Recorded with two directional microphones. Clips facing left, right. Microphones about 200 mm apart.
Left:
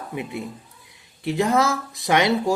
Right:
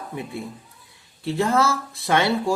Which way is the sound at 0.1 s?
20° left (ahead or behind).